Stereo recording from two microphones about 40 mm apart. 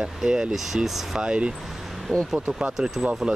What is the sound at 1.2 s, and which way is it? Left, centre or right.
Speech, right.